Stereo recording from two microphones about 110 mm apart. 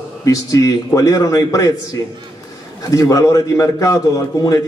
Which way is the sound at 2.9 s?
30° left (ahead or behind).